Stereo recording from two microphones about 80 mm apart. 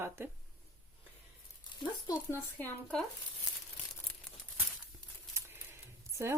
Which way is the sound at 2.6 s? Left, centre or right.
Left.